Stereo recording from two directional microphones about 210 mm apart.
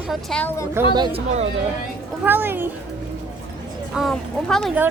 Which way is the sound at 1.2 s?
30° right (ahead or behind).